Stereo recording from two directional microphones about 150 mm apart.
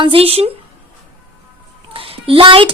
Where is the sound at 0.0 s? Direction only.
40° right (ahead or behind).